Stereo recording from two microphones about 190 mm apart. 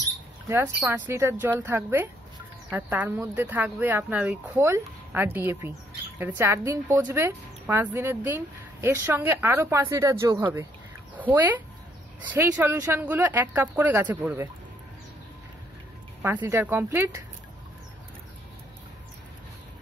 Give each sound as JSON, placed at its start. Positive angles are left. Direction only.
{"t": 0.5, "sound": "a woman's voice", "side_deg": -10}
{"t": 16.3, "sound": "a woman's voice", "side_deg": -15}